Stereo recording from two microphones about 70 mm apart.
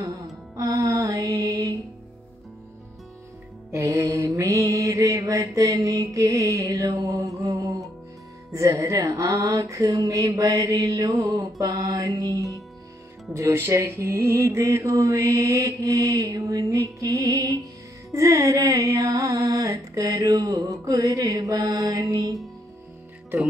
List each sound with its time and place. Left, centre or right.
0.6 s music: right
3.7 s mantra: right
8.5 s music: right
13.3 s music: right